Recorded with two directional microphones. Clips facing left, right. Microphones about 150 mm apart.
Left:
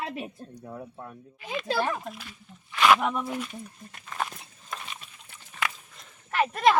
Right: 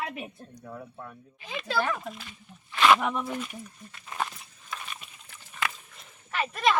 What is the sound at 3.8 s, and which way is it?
Speech, 40° left (ahead or behind).